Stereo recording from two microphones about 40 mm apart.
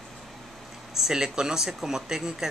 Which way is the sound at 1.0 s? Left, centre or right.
Centre.